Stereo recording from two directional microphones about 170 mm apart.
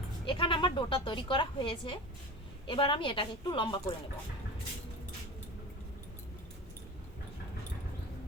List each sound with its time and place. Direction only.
0.3 s a woman's voice: 30° left (ahead or behind)